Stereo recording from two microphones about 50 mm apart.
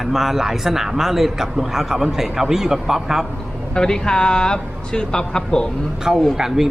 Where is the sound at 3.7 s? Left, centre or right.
Centre.